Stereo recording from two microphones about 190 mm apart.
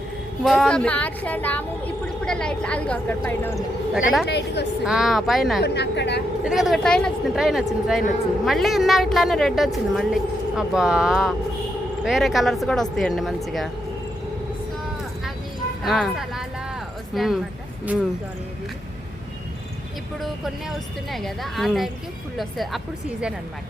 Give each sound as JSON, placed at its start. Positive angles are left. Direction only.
{"t": 0.4, "sound": "a woman's voice", "side_deg": 0}
{"t": 4.3, "sound": "a woman's voice", "side_deg": 65}
{"t": 4.9, "sound": "a woman's voice", "side_deg": 0}
{"t": 5.5, "sound": "a woman's voice", "side_deg": 60}
{"t": 6.4, "sound": "a woman's voice", "side_deg": 0}
{"t": 15.8, "sound": "a woman's voice", "side_deg": 0}
{"t": 20.1, "sound": "a woman's voice", "side_deg": 0}